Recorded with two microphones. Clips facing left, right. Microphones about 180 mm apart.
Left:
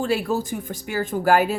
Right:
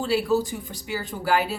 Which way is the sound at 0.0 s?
50° left (ahead or behind).